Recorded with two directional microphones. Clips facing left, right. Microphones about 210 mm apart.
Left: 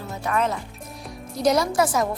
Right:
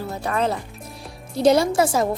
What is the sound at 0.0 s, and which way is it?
Speech, 35° right (ahead or behind).